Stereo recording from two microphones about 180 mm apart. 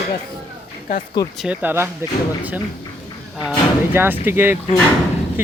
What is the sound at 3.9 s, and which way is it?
Speech, 10° right (ahead or behind).